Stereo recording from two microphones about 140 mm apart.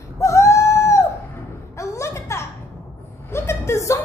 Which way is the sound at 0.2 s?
20° left (ahead or behind).